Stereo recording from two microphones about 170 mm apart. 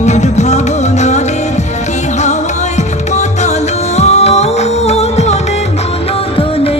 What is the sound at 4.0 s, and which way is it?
Music, 40° left (ahead or behind).